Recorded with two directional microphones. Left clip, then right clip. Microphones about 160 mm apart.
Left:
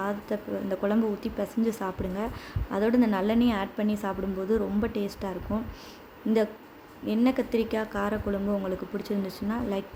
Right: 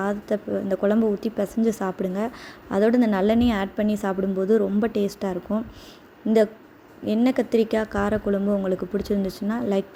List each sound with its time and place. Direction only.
0.0 s a woman's voice: 25° right (ahead or behind)
7.3 s a woman's voice: 25° right (ahead or behind)